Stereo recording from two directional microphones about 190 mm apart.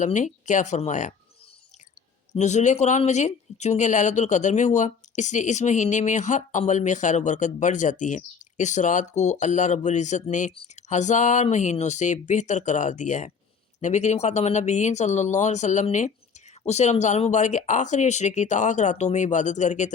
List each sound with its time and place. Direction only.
0.0 s speech: 40° left (ahead or behind)
2.3 s speech: 35° left (ahead or behind)